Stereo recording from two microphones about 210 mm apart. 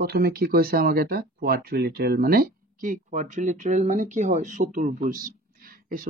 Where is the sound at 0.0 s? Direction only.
50° right (ahead or behind).